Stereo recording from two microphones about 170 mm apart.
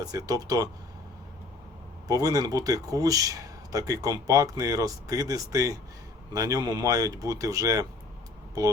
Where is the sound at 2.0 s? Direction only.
20° right (ahead or behind).